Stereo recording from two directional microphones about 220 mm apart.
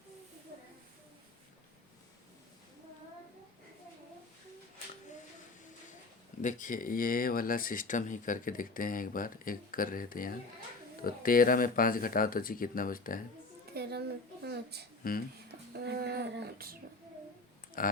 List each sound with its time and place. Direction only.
6.4 s speech: 35° left (ahead or behind)
13.7 s a sound: 50° right (ahead or behind)
17.8 s speech: 40° left (ahead or behind)